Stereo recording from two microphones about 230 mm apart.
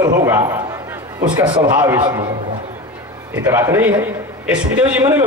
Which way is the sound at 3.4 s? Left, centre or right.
Centre.